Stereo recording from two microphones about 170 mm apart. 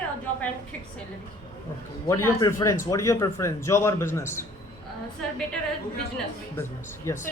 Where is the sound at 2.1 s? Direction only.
15° left (ahead or behind).